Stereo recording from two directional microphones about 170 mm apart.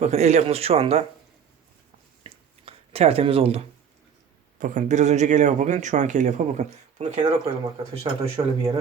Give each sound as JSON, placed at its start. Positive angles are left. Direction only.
{"t": 0.0, "sound": "speech", "side_deg": -40}
{"t": 2.2, "sound": "a sound", "side_deg": -35}
{"t": 4.6, "sound": "speech", "side_deg": -45}